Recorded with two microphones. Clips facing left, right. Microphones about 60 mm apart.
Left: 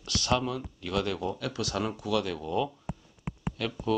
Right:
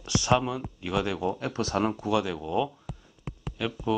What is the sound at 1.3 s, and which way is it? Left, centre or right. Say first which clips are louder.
Speech: right 4 dB; right.